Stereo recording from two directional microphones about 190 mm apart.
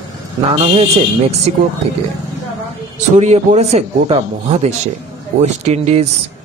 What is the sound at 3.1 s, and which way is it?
Speech, 35° right (ahead or behind).